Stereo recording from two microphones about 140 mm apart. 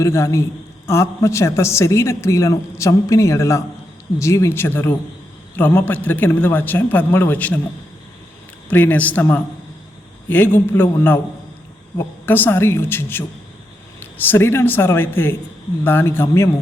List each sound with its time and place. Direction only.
0.0 s a man's voice: 20° left (ahead or behind)
8.7 s a man's voice: 10° left (ahead or behind)
10.2 s a man's voice: 15° left (ahead or behind)